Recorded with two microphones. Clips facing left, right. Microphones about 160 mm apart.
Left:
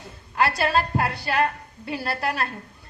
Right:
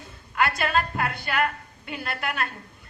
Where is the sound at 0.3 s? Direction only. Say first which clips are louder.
Left 2 dB; 30° left (ahead or behind).